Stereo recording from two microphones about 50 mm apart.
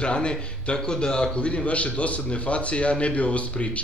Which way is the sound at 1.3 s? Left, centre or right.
Left.